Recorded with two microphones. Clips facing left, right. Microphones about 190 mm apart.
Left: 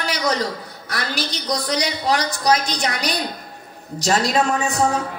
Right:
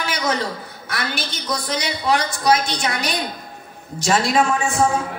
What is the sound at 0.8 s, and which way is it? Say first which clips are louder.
A man's voice: left 1 dB; 35° left (ahead or behind).